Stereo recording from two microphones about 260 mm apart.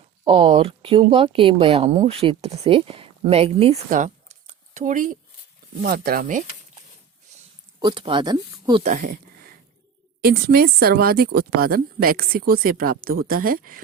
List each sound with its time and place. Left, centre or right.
0.3 s speech: centre
7.8 s speech: centre
8.8 s speech: right
10.2 s speech: right